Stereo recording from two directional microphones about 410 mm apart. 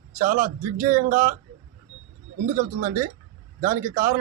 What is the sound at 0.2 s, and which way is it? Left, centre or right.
Speech, centre.